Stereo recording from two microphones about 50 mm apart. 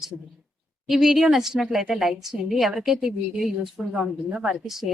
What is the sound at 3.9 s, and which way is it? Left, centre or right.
Speech, right.